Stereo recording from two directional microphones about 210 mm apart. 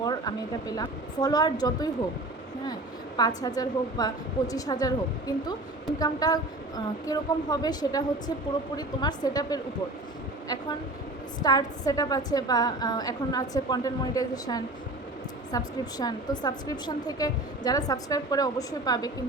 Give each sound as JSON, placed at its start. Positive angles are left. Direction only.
{"t": 0.0, "sound": "a woman's voice", "side_deg": 20}
{"t": 3.2, "sound": "a woman's voice", "side_deg": 20}
{"t": 6.0, "sound": "a woman's voice", "side_deg": 20}
{"t": 11.3, "sound": "a woman's voice", "side_deg": 20}